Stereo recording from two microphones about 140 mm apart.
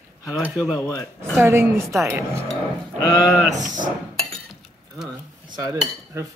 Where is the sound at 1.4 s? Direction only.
20° right (ahead or behind).